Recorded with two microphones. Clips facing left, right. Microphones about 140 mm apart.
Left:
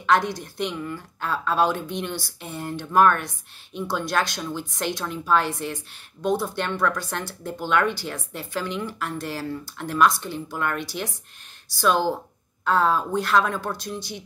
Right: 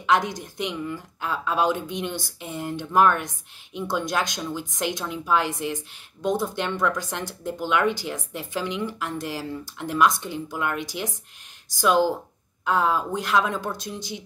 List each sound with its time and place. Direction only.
0.0 s speech: 15° right (ahead or behind)